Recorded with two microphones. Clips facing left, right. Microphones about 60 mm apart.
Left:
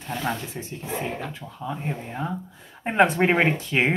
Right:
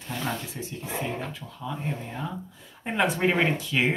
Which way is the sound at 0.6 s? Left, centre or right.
Left.